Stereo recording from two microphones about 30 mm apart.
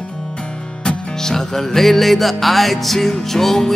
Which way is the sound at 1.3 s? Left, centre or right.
Centre.